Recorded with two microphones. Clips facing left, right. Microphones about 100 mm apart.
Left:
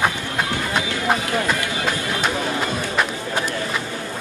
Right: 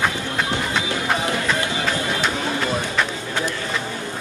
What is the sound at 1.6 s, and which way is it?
Run, 25° right (ahead or behind).